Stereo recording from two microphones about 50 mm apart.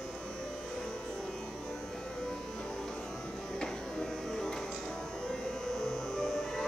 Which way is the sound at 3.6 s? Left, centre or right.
Centre.